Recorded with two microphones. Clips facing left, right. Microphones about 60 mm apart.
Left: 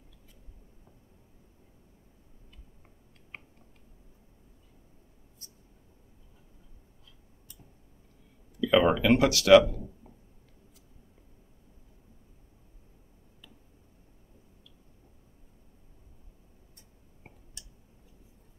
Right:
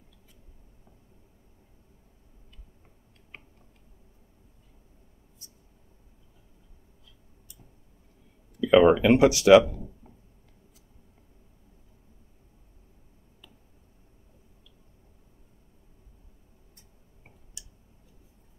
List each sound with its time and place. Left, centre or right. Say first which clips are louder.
8.5 s speech: right 5 dB; centre